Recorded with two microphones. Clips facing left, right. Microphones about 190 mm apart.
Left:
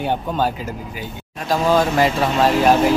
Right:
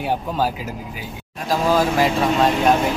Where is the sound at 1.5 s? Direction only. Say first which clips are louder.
Left 1 dB; centre (ahead or behind).